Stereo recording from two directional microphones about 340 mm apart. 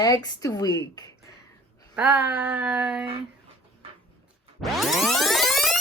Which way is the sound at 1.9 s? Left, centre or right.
Centre.